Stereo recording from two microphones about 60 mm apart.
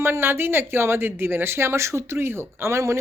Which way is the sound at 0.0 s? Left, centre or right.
Right.